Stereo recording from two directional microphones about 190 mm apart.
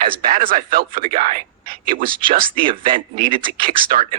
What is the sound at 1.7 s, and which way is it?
Speech, 50° right (ahead or behind).